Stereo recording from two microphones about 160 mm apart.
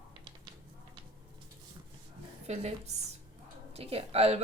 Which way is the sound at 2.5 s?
45° right (ahead or behind).